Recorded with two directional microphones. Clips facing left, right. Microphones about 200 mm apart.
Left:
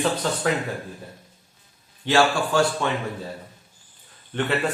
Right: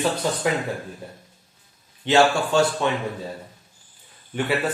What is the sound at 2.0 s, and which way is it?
Speech, 25° right (ahead or behind).